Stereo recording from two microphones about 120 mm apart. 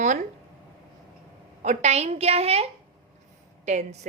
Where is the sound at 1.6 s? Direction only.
75° right (ahead or behind); by 2.7 s 60° right (ahead or behind).